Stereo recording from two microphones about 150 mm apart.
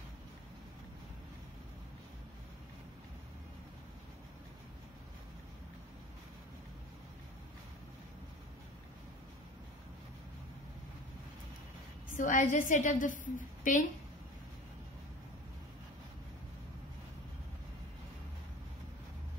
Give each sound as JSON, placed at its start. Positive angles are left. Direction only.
{"t": 12.2, "sound": "a woman's voice", "side_deg": 60}